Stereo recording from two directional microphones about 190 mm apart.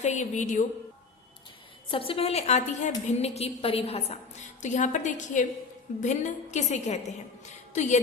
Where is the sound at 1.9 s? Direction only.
30° left (ahead or behind).